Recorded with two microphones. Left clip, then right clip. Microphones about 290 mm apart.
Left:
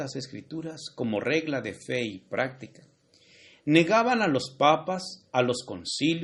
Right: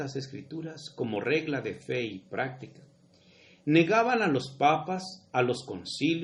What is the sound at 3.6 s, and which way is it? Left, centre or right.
Speech, left.